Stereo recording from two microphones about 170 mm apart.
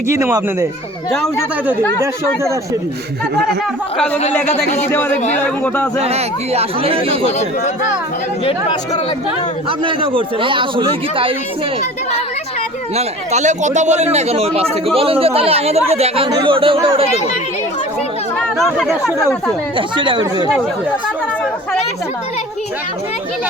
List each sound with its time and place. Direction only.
0.1 s speech: 15° right (ahead or behind)
3.9 s speech: 5° left (ahead or behind)
6.0 s speech: 40° right (ahead or behind)
7.3 s speech: 45° left (ahead or behind)
8.4 s speech: 25° left (ahead or behind)
9.6 s speech: 30° right (ahead or behind)
13.0 s speech: 45° right (ahead or behind)
18.3 s speech: centre (ahead or behind)
19.7 s speech: 30° right (ahead or behind)